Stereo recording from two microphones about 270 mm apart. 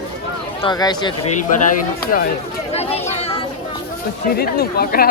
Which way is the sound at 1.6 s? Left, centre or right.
Left.